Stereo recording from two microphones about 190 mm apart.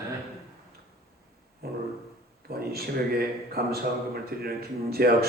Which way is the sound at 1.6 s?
55° right (ahead or behind).